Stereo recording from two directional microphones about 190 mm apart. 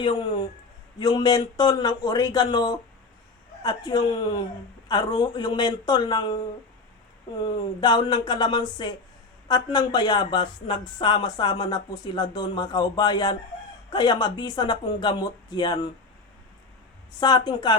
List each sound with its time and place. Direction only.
0.0 s speech: 25° left (ahead or behind)
7.4 s speech: 25° left (ahead or behind)
17.2 s speech: 20° left (ahead or behind)